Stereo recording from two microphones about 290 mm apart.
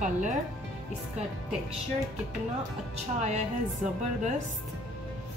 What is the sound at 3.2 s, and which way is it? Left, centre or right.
Speech, right.